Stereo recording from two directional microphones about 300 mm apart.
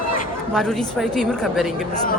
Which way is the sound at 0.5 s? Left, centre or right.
Centre.